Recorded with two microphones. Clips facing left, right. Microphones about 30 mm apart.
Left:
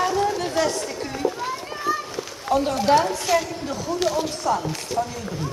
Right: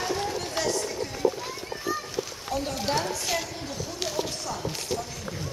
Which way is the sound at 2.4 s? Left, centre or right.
Left.